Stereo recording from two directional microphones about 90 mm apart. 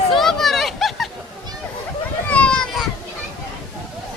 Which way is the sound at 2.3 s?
15° left (ahead or behind).